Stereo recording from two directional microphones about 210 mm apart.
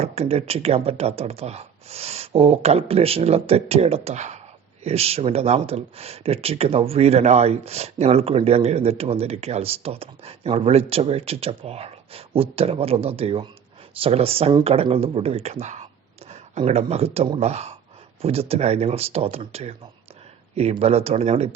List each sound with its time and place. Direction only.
0.0 s speech: 30° right (ahead or behind)